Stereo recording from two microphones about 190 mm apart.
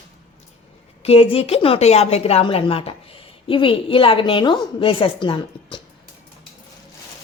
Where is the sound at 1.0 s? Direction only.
30° left (ahead or behind).